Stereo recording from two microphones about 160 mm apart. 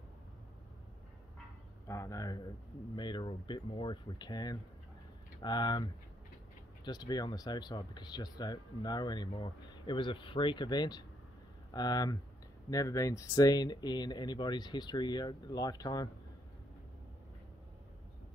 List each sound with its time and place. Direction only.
1.9 s speech: 20° left (ahead or behind)